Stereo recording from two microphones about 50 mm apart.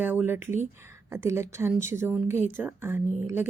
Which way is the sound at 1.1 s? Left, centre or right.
Right.